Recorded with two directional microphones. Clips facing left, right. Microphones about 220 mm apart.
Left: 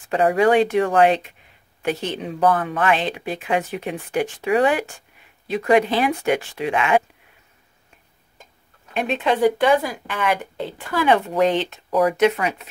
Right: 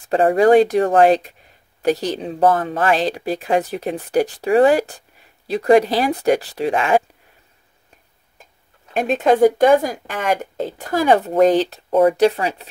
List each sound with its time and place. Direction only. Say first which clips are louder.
0.1 s speech: right 4 dB; 40° right (ahead or behind)
8.9 s a woman's voice: right 5 dB; 45° right (ahead or behind)